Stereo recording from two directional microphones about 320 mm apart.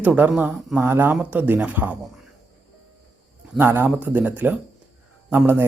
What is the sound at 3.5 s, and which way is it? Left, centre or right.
Speech, centre.